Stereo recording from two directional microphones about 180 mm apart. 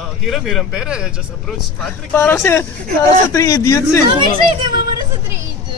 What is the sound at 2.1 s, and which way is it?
A man's voice, 15° left (ahead or behind).